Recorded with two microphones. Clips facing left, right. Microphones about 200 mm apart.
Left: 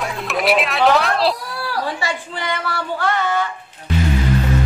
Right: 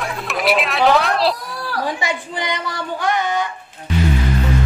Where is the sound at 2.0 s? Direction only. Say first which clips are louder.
Right 1 dB; 15° right (ahead or behind).